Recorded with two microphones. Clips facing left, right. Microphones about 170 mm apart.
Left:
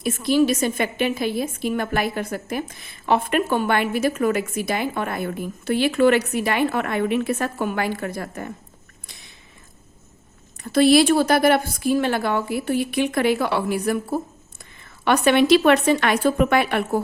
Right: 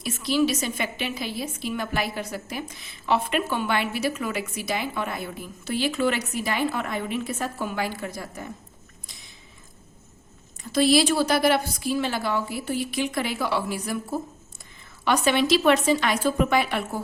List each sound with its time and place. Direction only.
0.0 s a woman's voice: 50° left (ahead or behind)
10.6 s a woman's voice: 60° left (ahead or behind)